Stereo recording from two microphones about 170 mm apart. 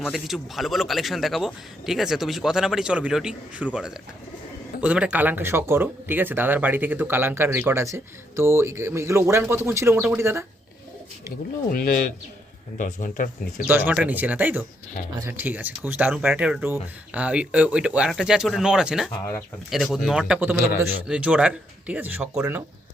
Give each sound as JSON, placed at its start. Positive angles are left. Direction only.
{"t": 0.0, "sound": "a man's voice", "side_deg": 0}
{"t": 11.7, "sound": "speech", "side_deg": 60}
{"t": 13.7, "sound": "a man's voice", "side_deg": -10}